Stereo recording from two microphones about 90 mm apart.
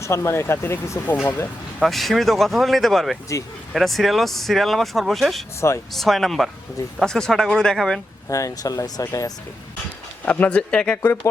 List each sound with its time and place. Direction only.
0.0 s speech: 30° left (ahead or behind)
1.8 s speech: centre (ahead or behind)
5.5 s speech: 30° left (ahead or behind)
5.9 s speech: centre (ahead or behind)
8.3 s speech: 40° left (ahead or behind)
10.2 s speech: 15° left (ahead or behind)
10.9 s speech: 30° left (ahead or behind)